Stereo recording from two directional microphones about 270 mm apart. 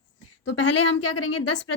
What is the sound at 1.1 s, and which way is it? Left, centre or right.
Speech, left.